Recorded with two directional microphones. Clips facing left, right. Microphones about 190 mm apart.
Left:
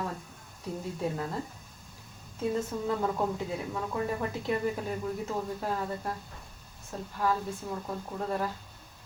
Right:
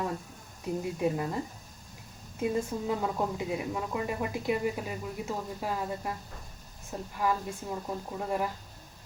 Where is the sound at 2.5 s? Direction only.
10° right (ahead or behind).